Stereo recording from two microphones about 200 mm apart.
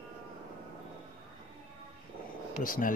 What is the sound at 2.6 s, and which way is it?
Speech, 45° left (ahead or behind).